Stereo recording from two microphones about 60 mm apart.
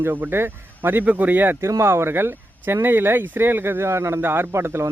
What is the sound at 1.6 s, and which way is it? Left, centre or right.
Speech, right.